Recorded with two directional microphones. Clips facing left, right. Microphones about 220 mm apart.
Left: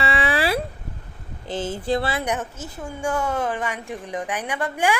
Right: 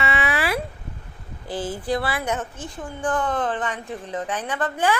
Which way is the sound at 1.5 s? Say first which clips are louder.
Left 1 dB; 25° left (ahead or behind).